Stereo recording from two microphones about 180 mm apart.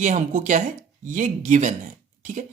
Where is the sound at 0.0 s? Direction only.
40° right (ahead or behind).